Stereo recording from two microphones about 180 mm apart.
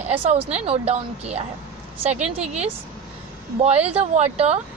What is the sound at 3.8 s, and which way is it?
Speech, 35° right (ahead or behind).